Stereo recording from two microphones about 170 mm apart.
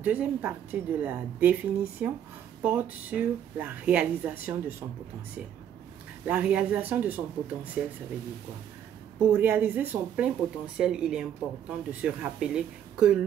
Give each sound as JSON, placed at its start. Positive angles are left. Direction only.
{"t": 0.0, "sound": "speech", "side_deg": -10}
{"t": 6.2, "sound": "speech", "side_deg": -5}
{"t": 9.2, "sound": "speech", "side_deg": -10}